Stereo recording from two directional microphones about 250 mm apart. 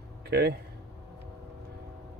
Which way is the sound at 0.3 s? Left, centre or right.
Right.